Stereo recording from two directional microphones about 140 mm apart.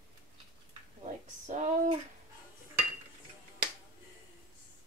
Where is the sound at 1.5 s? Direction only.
55° right (ahead or behind).